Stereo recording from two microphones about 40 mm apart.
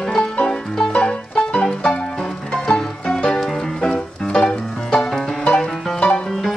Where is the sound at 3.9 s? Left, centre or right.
Centre.